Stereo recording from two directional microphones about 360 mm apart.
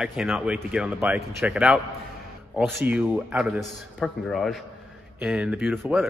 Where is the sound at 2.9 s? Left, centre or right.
Centre.